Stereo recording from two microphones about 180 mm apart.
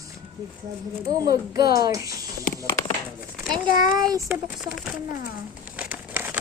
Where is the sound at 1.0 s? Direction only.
20° right (ahead or behind).